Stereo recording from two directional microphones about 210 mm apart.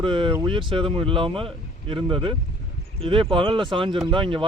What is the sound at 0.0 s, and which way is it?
Speech, 25° right (ahead or behind).